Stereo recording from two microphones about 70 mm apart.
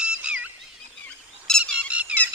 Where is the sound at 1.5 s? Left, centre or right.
Centre.